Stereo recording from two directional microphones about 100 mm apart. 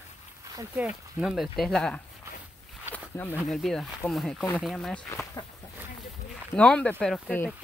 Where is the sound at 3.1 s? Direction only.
20° left (ahead or behind).